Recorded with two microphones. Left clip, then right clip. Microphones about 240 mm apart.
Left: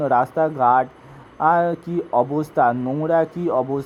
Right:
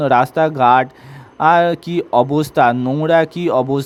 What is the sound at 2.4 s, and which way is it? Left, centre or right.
Speech, right.